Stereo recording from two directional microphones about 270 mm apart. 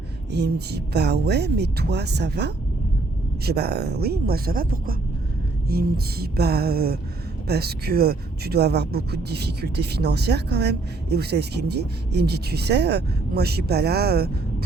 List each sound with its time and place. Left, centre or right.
0.3 s speech: right